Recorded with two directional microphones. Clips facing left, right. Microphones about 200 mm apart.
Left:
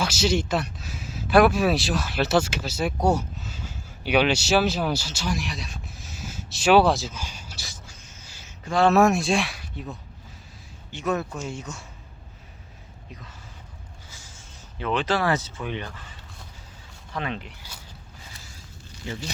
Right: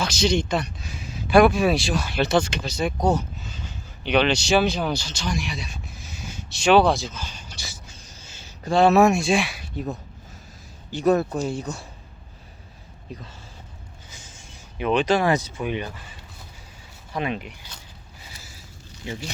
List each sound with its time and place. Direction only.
0.0 s speech: 5° left (ahead or behind)
8.0 s a sound: 35° right (ahead or behind)
8.9 s speech: centre (ahead or behind)
9.7 s speech: 40° right (ahead or behind)
14.1 s speech: 20° right (ahead or behind)